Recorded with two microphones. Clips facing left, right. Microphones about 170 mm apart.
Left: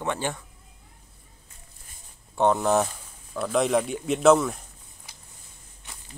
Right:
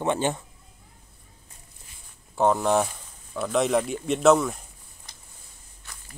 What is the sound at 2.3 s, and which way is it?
Speech, centre (ahead or behind).